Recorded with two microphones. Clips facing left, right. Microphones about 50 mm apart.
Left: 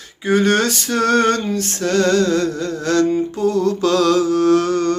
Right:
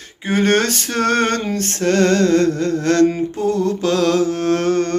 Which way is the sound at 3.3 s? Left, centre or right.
Right.